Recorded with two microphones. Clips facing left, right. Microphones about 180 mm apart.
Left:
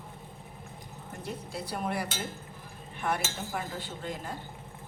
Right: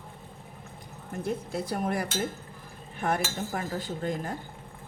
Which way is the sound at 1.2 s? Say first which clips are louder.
Right 7 dB; 50° right (ahead or behind).